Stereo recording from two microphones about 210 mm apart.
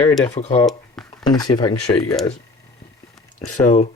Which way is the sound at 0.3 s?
30° left (ahead or behind).